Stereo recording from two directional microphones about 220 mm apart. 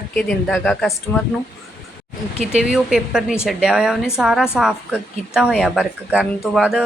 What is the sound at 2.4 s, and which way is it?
A woman's voice, 5° right (ahead or behind).